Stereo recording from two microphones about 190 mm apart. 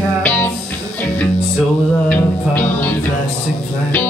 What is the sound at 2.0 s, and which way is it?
Music, 10° left (ahead or behind).